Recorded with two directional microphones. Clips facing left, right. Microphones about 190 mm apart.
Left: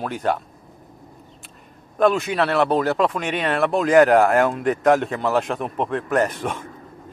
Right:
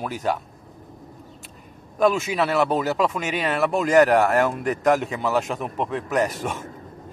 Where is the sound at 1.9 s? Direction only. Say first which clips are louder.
Left 2 dB; centre (ahead or behind).